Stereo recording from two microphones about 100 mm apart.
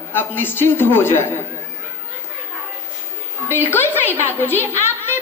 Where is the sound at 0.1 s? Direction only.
20° left (ahead or behind).